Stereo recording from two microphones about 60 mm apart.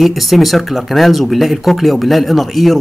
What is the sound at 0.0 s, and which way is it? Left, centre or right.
Speech, centre.